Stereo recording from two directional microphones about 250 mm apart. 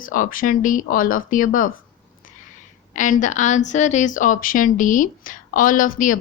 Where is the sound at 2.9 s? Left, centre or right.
Left.